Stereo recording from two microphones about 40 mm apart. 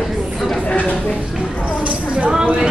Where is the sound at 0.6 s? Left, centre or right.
Left.